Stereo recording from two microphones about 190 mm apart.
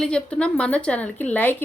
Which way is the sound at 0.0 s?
5° left (ahead or behind).